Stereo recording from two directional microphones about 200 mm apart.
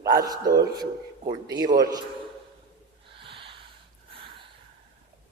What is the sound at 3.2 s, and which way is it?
Snort, 25° right (ahead or behind).